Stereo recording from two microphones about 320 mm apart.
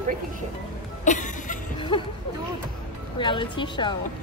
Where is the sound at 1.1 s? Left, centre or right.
Left.